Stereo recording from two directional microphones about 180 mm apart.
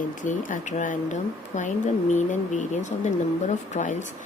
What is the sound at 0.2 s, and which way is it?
Speech, 45° left (ahead or behind).